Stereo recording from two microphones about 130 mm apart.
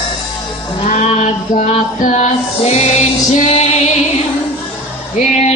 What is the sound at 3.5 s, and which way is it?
Female singing, 55° left (ahead or behind).